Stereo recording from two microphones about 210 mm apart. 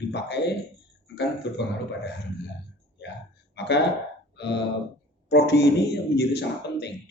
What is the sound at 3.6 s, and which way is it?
Speech, 55° left (ahead or behind).